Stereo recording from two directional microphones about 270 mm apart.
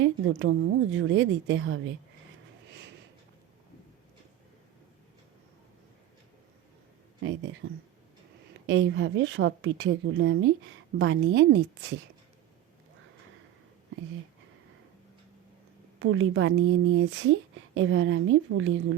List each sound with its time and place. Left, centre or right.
0.0 s a woman's voice: right
7.6 s a woman's voice: right
16.0 s a woman's voice: right